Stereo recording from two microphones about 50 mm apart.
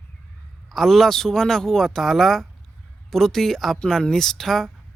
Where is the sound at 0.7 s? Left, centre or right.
Centre.